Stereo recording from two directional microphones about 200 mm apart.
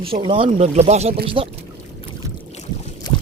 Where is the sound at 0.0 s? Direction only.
25° right (ahead or behind).